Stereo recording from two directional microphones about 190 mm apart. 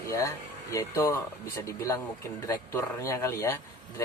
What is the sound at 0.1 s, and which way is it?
Speech, 15° left (ahead or behind).